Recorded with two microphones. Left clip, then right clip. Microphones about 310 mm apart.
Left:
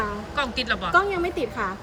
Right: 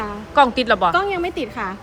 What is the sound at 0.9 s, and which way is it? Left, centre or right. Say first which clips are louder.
Speech: right 1 dB; right.